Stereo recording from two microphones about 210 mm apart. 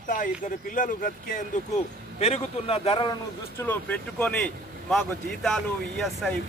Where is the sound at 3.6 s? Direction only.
10° left (ahead or behind).